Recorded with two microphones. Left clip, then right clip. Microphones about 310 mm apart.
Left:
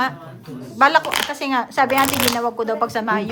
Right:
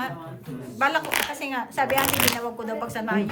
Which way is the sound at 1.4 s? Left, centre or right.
Left.